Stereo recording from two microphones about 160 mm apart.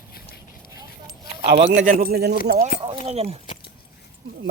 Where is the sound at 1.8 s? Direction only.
60° right (ahead or behind).